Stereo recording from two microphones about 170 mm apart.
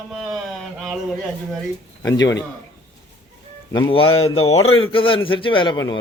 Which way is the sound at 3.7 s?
30° left (ahead or behind).